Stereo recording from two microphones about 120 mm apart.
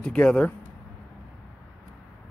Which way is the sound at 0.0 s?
10° left (ahead or behind).